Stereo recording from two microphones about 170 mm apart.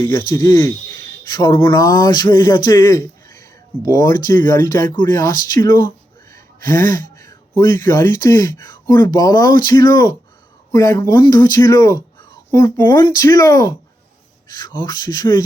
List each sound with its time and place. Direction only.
0.1 s speech: 25° left (ahead or behind)
7.2 s speech: 20° left (ahead or behind)